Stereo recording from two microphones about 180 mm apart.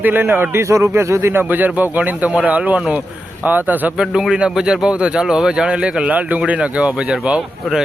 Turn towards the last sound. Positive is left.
turn(degrees=0)  # may be behind; listen again after turning